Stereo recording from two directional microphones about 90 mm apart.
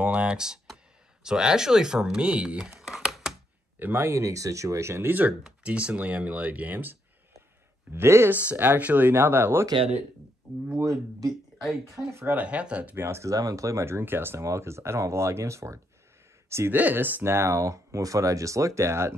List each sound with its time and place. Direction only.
0.0 s computer keyboard: 10° right (ahead or behind)
1.2 s speech: 5° right (ahead or behind)
2.8 s computer keyboard: 5° right (ahead or behind)
3.8 s speech: 25° right (ahead or behind)
5.4 s speech: 15° right (ahead or behind)
8.5 s speech: 20° right (ahead or behind)
10.8 s speech: 40° right (ahead or behind); by 13.0 s 15° right (ahead or behind)
13.0 s speech: 30° right (ahead or behind)